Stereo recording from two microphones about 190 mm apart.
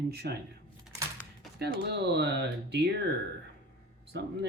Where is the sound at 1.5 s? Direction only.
60° right (ahead or behind).